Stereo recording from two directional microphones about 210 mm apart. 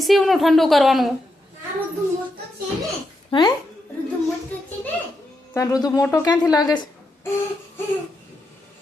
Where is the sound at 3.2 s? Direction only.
20° left (ahead or behind).